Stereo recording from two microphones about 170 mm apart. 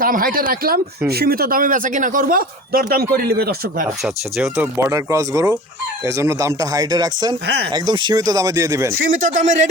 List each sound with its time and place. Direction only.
0.0 s speech: 55° right (ahead or behind)
4.0 s speech: 5° right (ahead or behind)
9.0 s speech: 50° right (ahead or behind)